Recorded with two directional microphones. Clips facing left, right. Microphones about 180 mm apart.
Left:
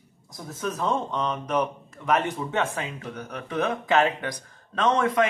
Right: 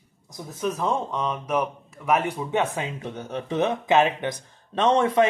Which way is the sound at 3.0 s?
25° right (ahead or behind).